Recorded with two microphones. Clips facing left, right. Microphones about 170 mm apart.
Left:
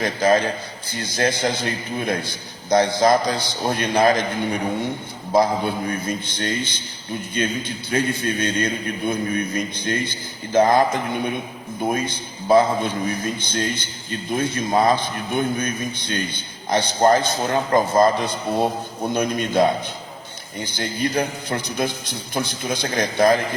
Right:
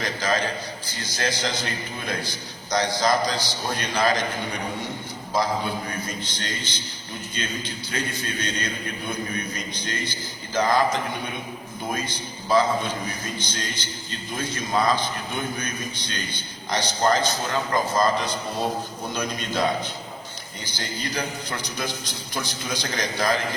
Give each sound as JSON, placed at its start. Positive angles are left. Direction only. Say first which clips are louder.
{"t": 0.0, "sound": "a man's voice", "louder": "left 7 dB", "side_deg": 55}
{"t": 6.2, "sound": "a man's voice", "louder": "left 7 dB", "side_deg": 55}
{"t": 14.7, "sound": "a man's voice", "louder": "left 4 dB", "side_deg": 25}
{"t": 14.9, "sound": "a man's voice", "louder": "left 5 dB", "side_deg": 55}
{"t": 17.7, "sound": "a man's voice", "louder": "left 7 dB", "side_deg": 25}
{"t": 18.0, "sound": "a man's voice", "louder": "left 5 dB", "side_deg": 55}